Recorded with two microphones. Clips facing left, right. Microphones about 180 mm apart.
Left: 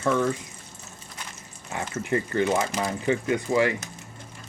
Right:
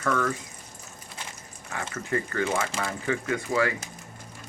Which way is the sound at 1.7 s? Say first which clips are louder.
Left 3 dB; 25° left (ahead or behind).